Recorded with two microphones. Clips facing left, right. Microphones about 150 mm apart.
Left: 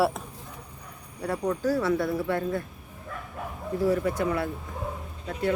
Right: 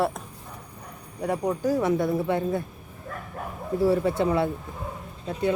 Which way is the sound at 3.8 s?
30° right (ahead or behind).